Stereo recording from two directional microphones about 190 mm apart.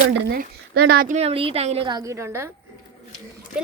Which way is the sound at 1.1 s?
30° right (ahead or behind).